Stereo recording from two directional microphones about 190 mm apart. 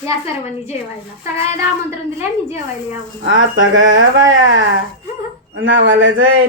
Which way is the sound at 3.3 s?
90° right.